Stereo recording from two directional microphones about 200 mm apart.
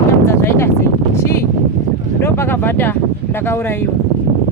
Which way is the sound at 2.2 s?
10° left (ahead or behind).